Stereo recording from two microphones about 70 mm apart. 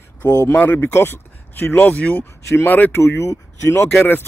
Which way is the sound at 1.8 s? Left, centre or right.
Left.